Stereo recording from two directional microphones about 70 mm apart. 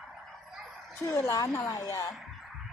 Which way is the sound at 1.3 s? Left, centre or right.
Left.